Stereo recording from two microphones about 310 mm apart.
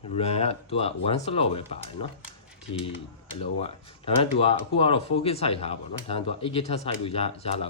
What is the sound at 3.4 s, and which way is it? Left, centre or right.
Speech, centre.